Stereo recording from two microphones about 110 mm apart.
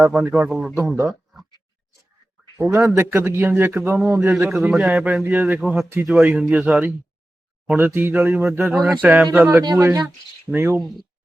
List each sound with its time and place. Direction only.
0.0 s a man's voice: 15° right (ahead or behind)
0.8 s a man's voice: 25° right (ahead or behind)
2.6 s a man's voice: 30° right (ahead or behind)
4.4 s a man's voice: 5° right (ahead or behind)
8.7 s a man's voice: 10° right (ahead or behind)